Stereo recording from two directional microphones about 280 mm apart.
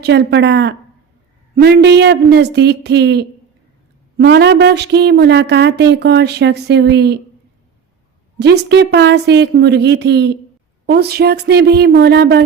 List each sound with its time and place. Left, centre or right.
0.0 s a woman's voice: right
8.4 s a woman's voice: right